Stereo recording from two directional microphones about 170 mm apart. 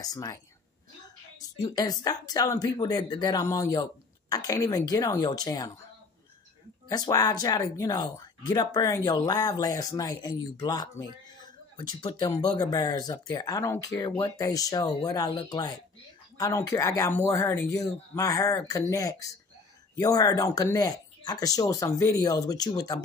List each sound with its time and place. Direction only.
0.0 s speech: 20° left (ahead or behind)
1.6 s speech: 20° left (ahead or behind)
6.9 s speech: 20° left (ahead or behind)